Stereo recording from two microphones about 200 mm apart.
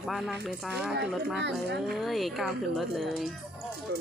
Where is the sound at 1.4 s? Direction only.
60° right (ahead or behind).